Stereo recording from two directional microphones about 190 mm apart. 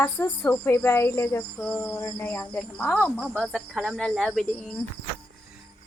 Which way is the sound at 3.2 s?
Centre (ahead or behind).